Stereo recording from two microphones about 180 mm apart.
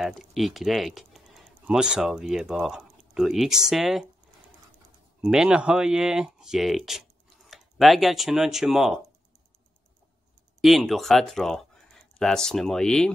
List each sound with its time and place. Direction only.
0.0 s speech: centre (ahead or behind)
5.2 s speech: 5° right (ahead or behind)
10.6 s speech: centre (ahead or behind)